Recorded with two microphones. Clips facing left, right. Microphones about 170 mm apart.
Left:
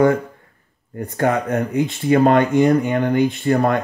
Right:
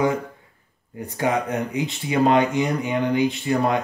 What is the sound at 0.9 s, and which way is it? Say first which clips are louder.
Speech: left 4 dB; 50° left (ahead or behind).